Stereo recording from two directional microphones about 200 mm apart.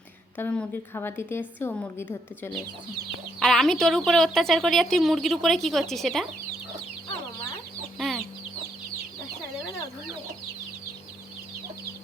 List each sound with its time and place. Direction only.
0.3 s a woman's voice: 5° left (ahead or behind)
7.9 s chicken: centre (ahead or behind)